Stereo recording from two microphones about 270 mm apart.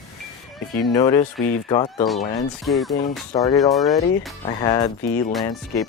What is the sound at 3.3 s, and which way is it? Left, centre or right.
Speech, centre.